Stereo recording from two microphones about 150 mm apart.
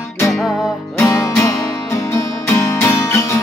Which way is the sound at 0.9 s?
20° left (ahead or behind).